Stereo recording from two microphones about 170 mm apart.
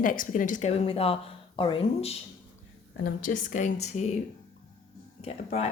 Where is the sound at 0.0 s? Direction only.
55° left (ahead or behind).